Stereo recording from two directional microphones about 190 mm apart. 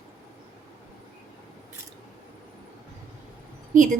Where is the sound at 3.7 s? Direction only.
40° right (ahead or behind).